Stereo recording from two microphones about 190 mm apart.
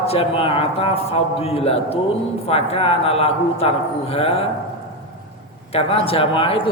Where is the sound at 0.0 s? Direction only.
30° left (ahead or behind).